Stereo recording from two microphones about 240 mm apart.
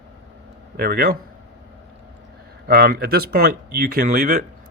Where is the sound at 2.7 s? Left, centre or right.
Right.